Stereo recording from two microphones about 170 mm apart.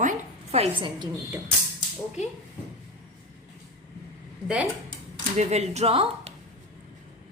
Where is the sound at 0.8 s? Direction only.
25° right (ahead or behind).